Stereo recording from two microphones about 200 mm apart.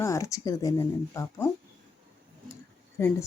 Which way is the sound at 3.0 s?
10° left (ahead or behind).